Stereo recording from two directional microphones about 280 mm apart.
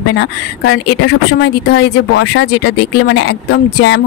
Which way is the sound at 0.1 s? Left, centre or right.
Left.